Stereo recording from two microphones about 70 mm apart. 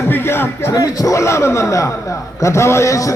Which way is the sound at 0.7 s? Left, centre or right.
Left.